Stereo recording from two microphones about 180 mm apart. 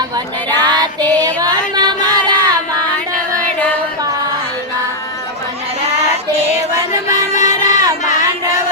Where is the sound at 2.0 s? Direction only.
25° right (ahead or behind).